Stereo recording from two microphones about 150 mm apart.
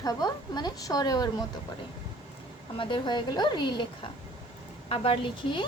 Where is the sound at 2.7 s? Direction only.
35° left (ahead or behind).